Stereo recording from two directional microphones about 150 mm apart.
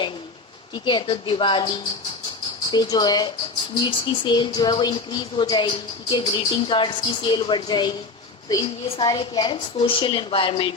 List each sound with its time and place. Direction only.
0.7 s speech: 30° left (ahead or behind)
2.7 s speech: 25° left (ahead or behind)